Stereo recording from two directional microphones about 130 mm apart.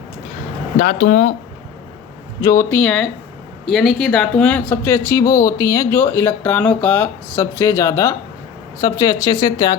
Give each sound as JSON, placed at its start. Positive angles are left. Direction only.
{"t": 0.8, "sound": "speech", "side_deg": 85}
{"t": 2.4, "sound": "speech", "side_deg": 25}
{"t": 2.6, "sound": "speech", "side_deg": 10}
{"t": 7.3, "sound": "speech", "side_deg": 25}